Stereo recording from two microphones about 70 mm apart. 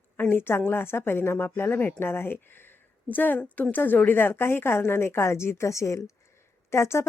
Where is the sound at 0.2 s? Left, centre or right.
Left.